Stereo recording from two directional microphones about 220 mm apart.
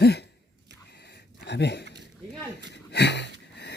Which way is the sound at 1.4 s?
50° left (ahead or behind).